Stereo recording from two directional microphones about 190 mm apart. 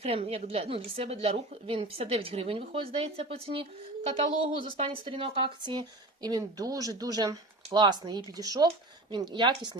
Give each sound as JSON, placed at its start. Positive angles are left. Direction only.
{"t": 0.0, "sound": "a woman's voice", "side_deg": -30}